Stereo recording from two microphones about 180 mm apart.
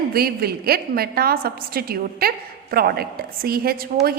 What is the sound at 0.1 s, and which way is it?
A woman's voice, 60° right (ahead or behind).